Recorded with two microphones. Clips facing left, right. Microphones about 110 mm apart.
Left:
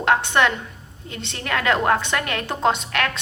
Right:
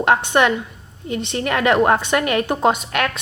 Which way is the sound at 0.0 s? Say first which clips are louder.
Right 3 dB; 15° right (ahead or behind).